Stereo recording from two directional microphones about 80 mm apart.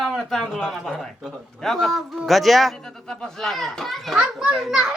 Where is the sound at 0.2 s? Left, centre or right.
Centre.